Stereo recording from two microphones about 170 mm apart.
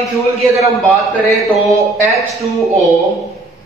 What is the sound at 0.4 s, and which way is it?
A man's voice, centre (ahead or behind).